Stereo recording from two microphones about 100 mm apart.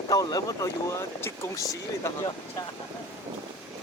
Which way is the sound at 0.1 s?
40° left (ahead or behind).